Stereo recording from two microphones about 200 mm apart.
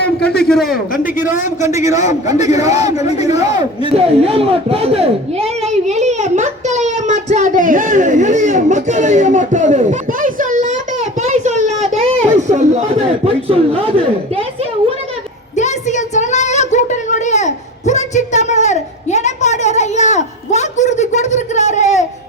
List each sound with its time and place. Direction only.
0.2 s a man's voice: 5° left (ahead or behind)
1.6 s a man's voice: 15° right (ahead or behind)
3.9 s a child's voice: 30° right (ahead or behind)
11.2 s a sound: 35° right (ahead or behind)
12.5 s a man's voice: 35° right (ahead or behind)
15.5 s a sound: 35° left (ahead or behind)